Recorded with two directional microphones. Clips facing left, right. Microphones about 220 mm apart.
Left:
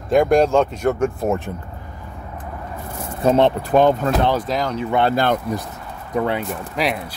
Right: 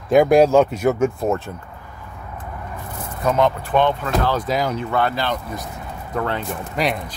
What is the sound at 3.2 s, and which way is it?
Speech, 30° left (ahead or behind).